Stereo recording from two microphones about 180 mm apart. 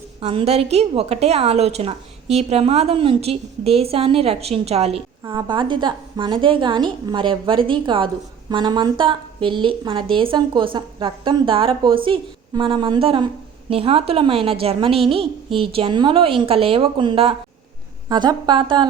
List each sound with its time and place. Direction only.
0.2 s a woman's voice: 35° right (ahead or behind)